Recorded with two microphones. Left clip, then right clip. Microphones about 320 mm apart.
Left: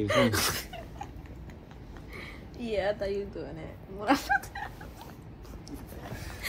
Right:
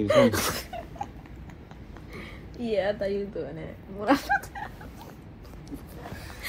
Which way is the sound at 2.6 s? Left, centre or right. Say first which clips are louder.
Right 3 dB; centre.